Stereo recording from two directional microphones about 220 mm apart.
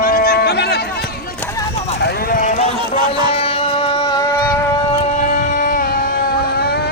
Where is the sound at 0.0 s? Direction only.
40° left (ahead or behind).